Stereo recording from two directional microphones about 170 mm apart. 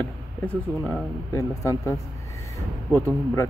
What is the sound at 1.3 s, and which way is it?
Speech, 20° left (ahead or behind).